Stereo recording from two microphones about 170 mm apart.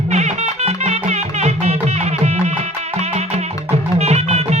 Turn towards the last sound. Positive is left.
turn(degrees=-40)  # may be behind; listen again after turning